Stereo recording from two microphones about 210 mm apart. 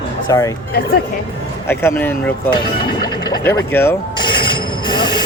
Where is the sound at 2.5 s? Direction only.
20° left (ahead or behind).